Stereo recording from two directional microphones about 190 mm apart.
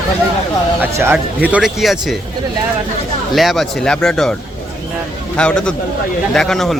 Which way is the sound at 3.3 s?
Centre (ahead or behind).